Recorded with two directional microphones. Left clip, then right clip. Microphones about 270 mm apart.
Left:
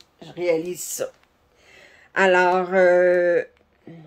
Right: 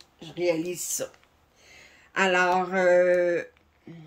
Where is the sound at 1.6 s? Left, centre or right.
Centre.